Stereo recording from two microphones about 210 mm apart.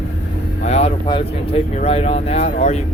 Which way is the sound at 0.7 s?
30° left (ahead or behind).